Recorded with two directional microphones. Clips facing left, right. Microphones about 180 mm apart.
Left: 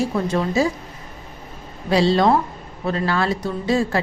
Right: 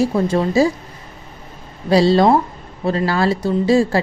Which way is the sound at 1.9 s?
35° right (ahead or behind).